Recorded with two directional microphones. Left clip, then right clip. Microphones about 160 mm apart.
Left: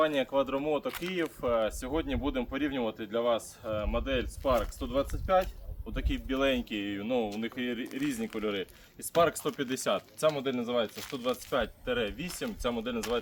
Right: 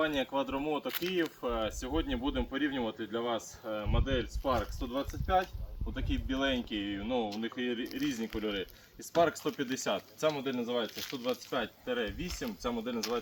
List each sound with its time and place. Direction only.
0.0 s speech: 30° left (ahead or behind)
0.9 s speech: 10° left (ahead or behind)
1.4 s speech: 30° left (ahead or behind)
7.9 s speech: 45° left (ahead or behind)
10.9 s speech: 15° left (ahead or behind)
11.3 s speech: 30° left (ahead or behind); by 13.1 s 15° left (ahead or behind)